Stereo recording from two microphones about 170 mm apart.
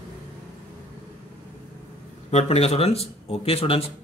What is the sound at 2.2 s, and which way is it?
Speech, 40° left (ahead or behind).